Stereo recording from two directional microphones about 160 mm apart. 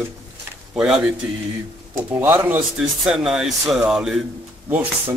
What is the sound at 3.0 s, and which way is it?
A man's voice, centre (ahead or behind).